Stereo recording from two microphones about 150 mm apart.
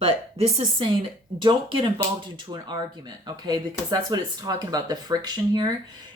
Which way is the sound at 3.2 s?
25° right (ahead or behind).